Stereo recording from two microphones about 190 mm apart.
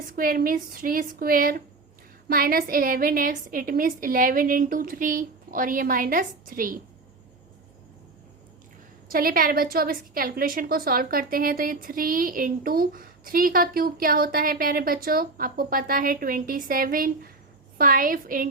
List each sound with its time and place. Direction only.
0.2 s a woman's voice: 50° right (ahead or behind)
9.0 s a woman's voice: 50° right (ahead or behind)